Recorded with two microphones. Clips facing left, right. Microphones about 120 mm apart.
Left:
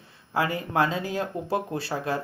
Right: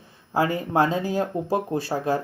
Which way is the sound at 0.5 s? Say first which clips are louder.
Right 3 dB; 40° right (ahead or behind).